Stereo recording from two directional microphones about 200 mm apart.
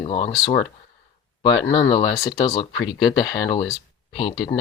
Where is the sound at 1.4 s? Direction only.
20° left (ahead or behind).